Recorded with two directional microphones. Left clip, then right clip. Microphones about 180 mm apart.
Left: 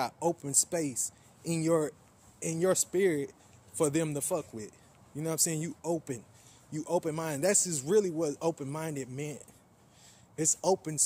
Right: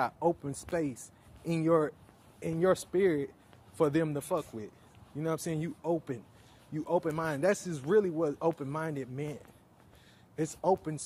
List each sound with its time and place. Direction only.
0.0 s speech: 10° left (ahead or behind)
10.6 s speech: 15° left (ahead or behind)